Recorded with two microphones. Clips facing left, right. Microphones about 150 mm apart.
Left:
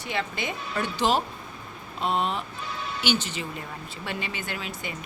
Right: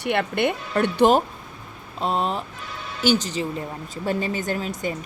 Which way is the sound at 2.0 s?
35° right (ahead or behind).